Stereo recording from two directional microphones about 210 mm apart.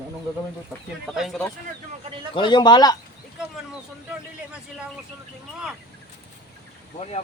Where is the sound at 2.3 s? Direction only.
20° left (ahead or behind).